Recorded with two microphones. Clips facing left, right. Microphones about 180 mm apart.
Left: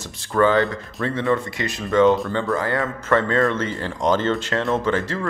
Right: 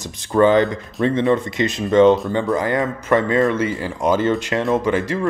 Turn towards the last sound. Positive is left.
turn(degrees=-15)  # may be behind; listen again after turning